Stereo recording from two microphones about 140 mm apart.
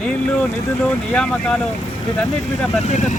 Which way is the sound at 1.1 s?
5° left (ahead or behind).